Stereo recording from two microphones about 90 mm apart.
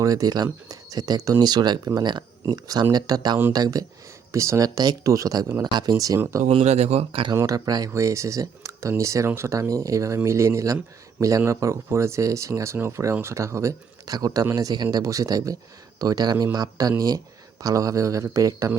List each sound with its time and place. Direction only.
0.0 s speech: 45° right (ahead or behind)
6.1 s speech: 30° right (ahead or behind)
7.1 s speech: 75° right (ahead or behind)
7.4 s speech: 45° right (ahead or behind)